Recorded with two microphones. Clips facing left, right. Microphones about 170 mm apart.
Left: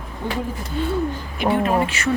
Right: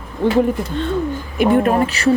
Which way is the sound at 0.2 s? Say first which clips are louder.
Right 10 dB; 90° right.